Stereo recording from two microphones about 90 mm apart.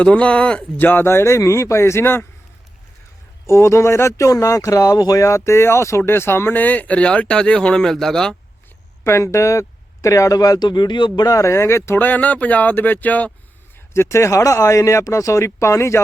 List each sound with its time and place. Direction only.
0.0 s speech: 15° left (ahead or behind)
0.9 s speech: 25° left (ahead or behind)
3.5 s speech: 30° left (ahead or behind); by 8.4 s 5° left (ahead or behind)
9.0 s speech: 30° left (ahead or behind)
13.9 s speech: 30° left (ahead or behind)